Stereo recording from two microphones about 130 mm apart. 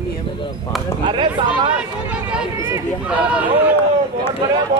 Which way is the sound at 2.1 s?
10° right (ahead or behind).